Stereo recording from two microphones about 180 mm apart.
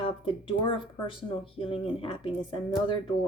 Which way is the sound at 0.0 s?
30° left (ahead or behind).